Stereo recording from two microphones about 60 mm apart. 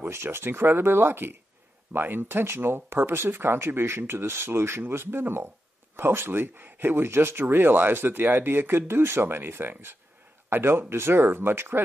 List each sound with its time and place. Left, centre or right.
0.0 s speech: right